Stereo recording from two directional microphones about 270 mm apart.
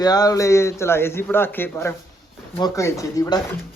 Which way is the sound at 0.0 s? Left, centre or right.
Centre.